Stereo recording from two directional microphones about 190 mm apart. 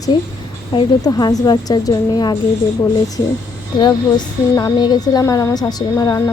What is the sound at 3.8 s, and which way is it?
A woman's voice, 20° left (ahead or behind).